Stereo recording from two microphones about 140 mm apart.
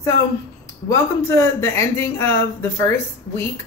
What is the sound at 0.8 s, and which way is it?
A man's voice, 20° left (ahead or behind).